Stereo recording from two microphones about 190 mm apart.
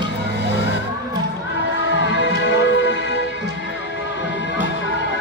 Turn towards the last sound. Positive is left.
turn(degrees=70)  # may be behind; listen again after turning